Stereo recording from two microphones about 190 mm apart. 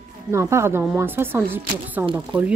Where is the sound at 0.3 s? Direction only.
15° right (ahead or behind).